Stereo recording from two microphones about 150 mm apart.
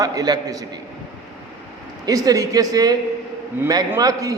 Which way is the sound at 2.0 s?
25° right (ahead or behind).